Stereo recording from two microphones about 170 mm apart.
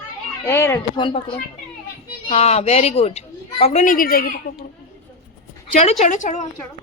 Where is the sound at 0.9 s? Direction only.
30° left (ahead or behind).